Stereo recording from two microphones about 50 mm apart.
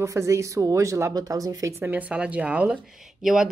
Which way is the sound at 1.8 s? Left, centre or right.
Right.